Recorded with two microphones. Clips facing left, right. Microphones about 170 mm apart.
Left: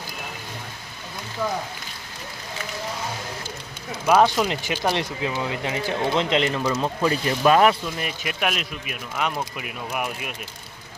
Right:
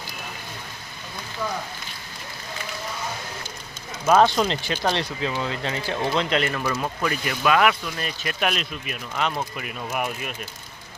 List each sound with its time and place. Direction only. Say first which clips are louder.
4.0 s speech: even; 5° left (ahead or behind); by 7.9 s 30° left (ahead or behind)
7.9 s speech: even; 15° left (ahead or behind)